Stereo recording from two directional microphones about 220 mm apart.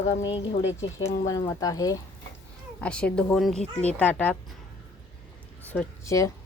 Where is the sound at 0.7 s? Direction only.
60° left (ahead or behind).